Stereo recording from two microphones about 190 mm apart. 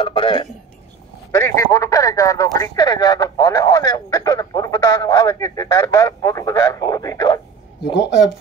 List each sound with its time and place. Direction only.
0.0 s speech: 30° left (ahead or behind)
7.8 s speech: 65° left (ahead or behind)